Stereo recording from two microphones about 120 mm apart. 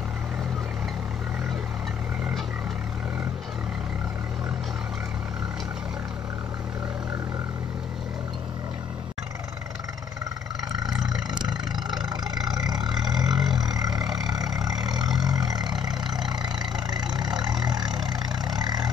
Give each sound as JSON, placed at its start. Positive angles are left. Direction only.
{"t": 13.3, "sound": "vehicle", "side_deg": -5}
{"t": 13.7, "sound": "vehicle", "side_deg": -30}
{"t": 14.0, "sound": "vehicle", "side_deg": -5}
{"t": 14.3, "sound": "vehicle", "side_deg": -35}
{"t": 14.7, "sound": "vehicle", "side_deg": -5}
{"t": 15.1, "sound": "vehicle", "side_deg": -35}
{"t": 16.9, "sound": "vehicle", "side_deg": -35}